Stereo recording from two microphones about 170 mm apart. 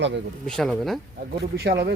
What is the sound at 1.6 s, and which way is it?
Speech, 70° right (ahead or behind).